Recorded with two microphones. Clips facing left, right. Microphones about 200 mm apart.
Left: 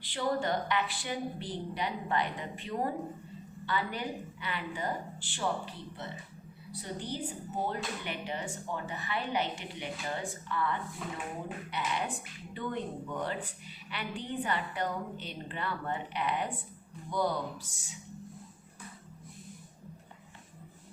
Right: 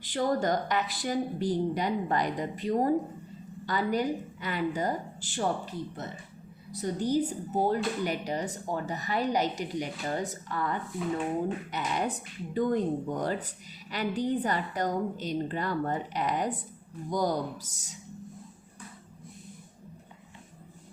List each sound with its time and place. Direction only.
0.0 s a woman's voice: 45° right (ahead or behind)